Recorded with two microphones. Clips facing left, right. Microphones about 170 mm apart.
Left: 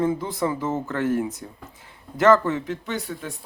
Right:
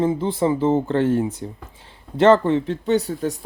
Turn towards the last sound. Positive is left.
turn(degrees=-35)  # may be behind; listen again after turning